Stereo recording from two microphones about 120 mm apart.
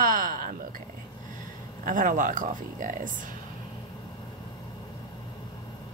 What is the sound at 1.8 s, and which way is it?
Speech, 90° right.